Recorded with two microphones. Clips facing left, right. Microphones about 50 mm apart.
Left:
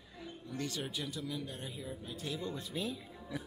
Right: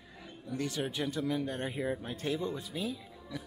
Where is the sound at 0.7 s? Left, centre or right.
Right.